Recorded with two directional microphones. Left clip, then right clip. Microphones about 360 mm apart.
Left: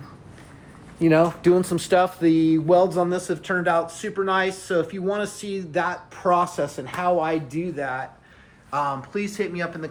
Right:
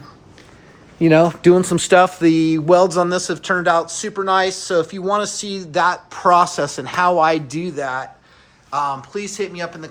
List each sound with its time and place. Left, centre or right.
1.0 s speech: right; by 9.9 s centre